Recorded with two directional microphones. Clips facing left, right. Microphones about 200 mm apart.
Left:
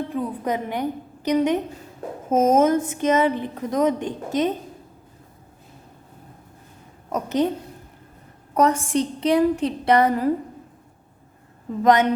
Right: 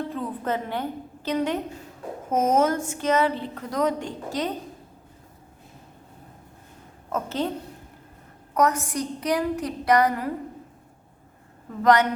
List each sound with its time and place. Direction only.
0.1 s a woman's voice: 15° left (ahead or behind)
7.1 s a woman's voice: 15° left (ahead or behind)
8.5 s a woman's voice: 30° left (ahead or behind)
11.8 s a woman's voice: 20° left (ahead or behind)